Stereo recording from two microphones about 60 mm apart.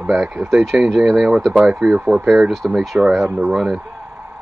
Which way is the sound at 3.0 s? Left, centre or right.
Centre.